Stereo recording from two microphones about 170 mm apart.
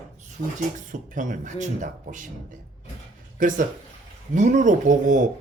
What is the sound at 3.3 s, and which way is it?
Speech, 50° right (ahead or behind).